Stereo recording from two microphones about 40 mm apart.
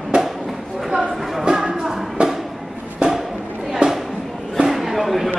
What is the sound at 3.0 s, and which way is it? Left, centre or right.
Music, right.